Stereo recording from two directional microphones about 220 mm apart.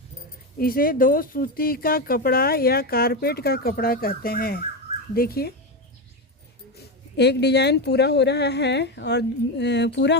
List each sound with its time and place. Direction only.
0.6 s speech: 40° left (ahead or behind)
6.7 s speech: 50° left (ahead or behind)